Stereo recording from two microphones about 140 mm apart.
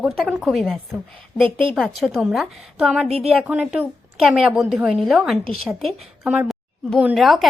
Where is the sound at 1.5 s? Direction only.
35° right (ahead or behind).